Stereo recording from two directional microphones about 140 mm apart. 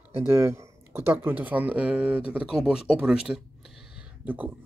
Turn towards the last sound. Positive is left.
turn(degrees=-10)  # may be behind; listen again after turning